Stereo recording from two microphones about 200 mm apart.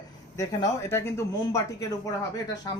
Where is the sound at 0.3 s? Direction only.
15° left (ahead or behind).